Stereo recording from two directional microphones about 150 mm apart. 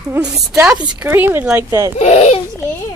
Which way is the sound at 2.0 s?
45° left (ahead or behind).